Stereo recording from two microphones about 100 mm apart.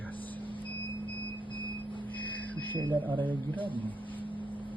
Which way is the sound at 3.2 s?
15° left (ahead or behind).